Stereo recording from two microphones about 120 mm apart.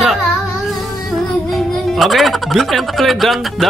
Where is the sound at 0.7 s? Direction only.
Centre (ahead or behind).